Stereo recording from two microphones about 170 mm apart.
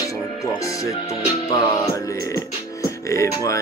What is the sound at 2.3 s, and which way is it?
Music, 20° left (ahead or behind).